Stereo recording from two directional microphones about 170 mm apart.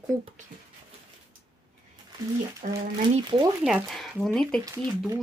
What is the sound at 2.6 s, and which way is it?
Speech, 45° right (ahead or behind).